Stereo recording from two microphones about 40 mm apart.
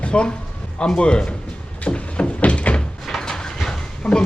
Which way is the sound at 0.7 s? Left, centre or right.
Left.